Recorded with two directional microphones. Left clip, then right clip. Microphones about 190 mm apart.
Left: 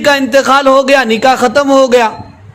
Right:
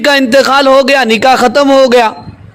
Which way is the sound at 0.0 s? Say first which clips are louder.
Right 2 dB; 45° right (ahead or behind).